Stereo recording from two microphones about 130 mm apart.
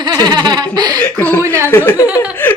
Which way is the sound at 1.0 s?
15° left (ahead or behind).